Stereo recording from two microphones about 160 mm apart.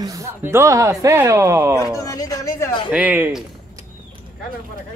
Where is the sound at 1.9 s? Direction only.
20° left (ahead or behind).